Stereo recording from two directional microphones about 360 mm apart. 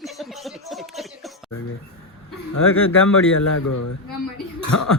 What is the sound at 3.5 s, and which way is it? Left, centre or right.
Speech, left.